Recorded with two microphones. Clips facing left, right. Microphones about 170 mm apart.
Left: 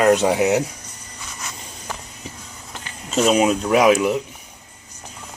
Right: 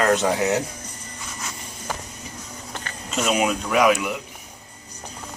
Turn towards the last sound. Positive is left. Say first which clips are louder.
# left 4 dB
turn(degrees=35)  # may be behind; listen again after turning